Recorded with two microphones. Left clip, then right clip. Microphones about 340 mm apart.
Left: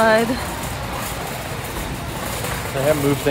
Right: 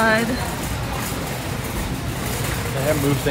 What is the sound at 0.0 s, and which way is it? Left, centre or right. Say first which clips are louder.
Vehicle: left 3 dB; centre.